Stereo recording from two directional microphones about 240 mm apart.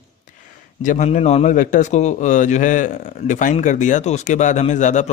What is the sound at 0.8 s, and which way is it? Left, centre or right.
A man's voice, left.